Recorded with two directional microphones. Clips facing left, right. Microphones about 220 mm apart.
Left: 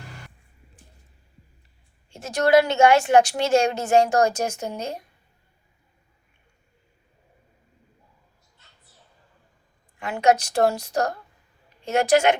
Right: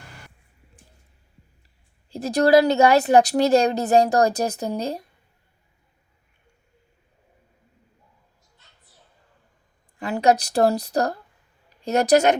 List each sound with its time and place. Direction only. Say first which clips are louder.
2.0 s a woman's voice: right 3 dB; 35° right (ahead or behind)
10.0 s a woman's voice: right 1 dB; 35° right (ahead or behind)